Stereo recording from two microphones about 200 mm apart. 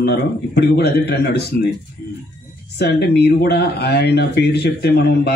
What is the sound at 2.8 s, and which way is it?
A man's voice, 55° left (ahead or behind).